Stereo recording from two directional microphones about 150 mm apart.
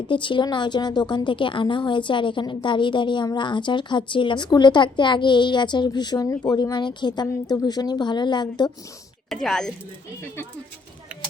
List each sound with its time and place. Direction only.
0.1 s a woman's voice: 35° left (ahead or behind)
9.3 s speech: 5° left (ahead or behind)